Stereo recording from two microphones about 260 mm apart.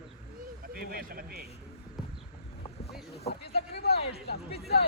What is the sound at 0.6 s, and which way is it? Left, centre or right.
Speech, right.